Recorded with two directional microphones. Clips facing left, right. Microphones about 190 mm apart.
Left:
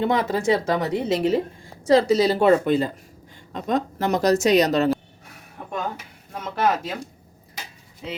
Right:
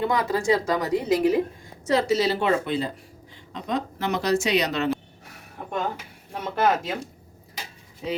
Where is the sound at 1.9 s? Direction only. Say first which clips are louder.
Left 5 dB; 35° left (ahead or behind).